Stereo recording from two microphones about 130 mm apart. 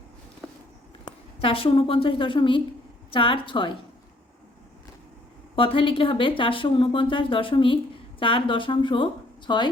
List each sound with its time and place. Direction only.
0.4 s walk: 5° left (ahead or behind)
1.4 s a woman's voice: 45° left (ahead or behind)
5.5 s a woman's voice: 45° left (ahead or behind)